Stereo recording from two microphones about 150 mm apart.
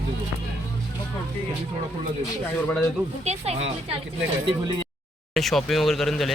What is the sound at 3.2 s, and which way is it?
Speech, 45° right (ahead or behind).